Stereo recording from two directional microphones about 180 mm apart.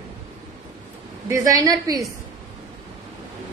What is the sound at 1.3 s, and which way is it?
Speech, 20° right (ahead or behind).